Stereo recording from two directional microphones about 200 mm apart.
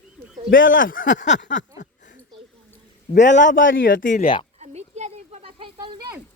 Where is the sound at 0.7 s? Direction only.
40° left (ahead or behind).